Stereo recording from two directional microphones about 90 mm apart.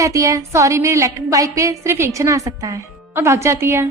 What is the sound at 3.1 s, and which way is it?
Speech, 30° right (ahead or behind).